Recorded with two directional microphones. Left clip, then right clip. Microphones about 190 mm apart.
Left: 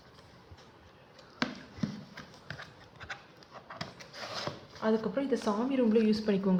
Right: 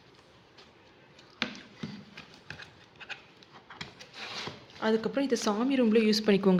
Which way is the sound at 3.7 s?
10° right (ahead or behind).